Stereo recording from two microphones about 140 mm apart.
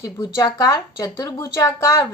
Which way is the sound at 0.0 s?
25° left (ahead or behind).